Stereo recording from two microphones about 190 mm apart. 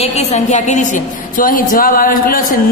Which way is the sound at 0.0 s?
35° left (ahead or behind).